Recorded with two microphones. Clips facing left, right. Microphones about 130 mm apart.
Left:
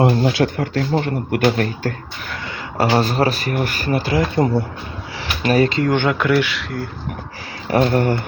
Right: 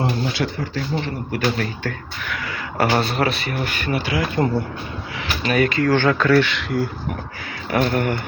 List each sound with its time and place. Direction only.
0.0 s speech: 50° left (ahead or behind)
2.3 s a sound: 25° left (ahead or behind)
3.0 s speech: 40° left (ahead or behind)
5.5 s speech: 30° left (ahead or behind); by 6.7 s 10° left (ahead or behind)
7.7 s speech: 35° left (ahead or behind)